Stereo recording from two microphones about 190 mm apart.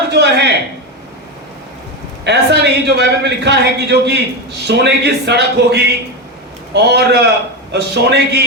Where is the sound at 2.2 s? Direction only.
65° right (ahead or behind).